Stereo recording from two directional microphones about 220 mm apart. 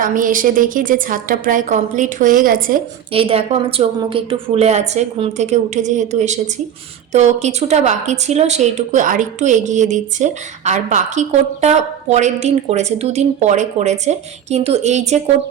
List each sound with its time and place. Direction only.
0.0 s speech: 40° right (ahead or behind)
3.1 s a woman's voice: 25° right (ahead or behind)